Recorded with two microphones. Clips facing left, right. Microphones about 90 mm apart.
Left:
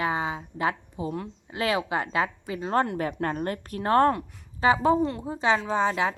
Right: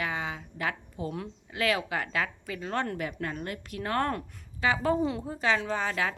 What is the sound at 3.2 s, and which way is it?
A woman's voice, 45° left (ahead or behind).